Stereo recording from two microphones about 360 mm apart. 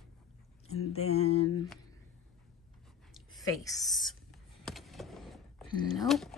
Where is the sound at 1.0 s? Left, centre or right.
Centre.